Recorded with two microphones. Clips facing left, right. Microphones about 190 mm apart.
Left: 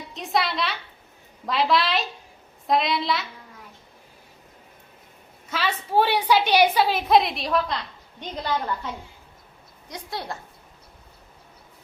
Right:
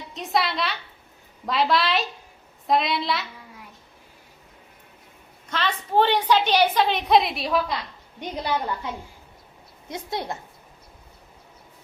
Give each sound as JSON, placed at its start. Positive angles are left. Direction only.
{"t": 0.1, "sound": "a woman's voice", "side_deg": 0}
{"t": 5.5, "sound": "a woman's voice", "side_deg": 5}
{"t": 8.2, "sound": "a woman's voice", "side_deg": -15}
{"t": 9.9, "sound": "a woman's voice", "side_deg": -20}